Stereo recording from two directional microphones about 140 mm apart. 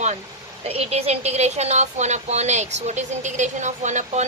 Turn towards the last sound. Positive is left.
turn(degrees=-55)  # may be behind; listen again after turning